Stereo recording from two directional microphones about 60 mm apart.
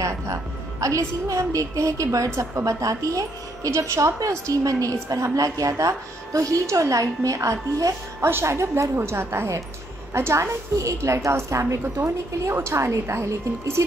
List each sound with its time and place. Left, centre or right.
0.0 s a woman's voice: right
2.1 s a woman's voice: right
6.6 s a woman's voice: right
8.2 s a woman's voice: right
8.9 s a woman's voice: right
10.8 s a woman's voice: right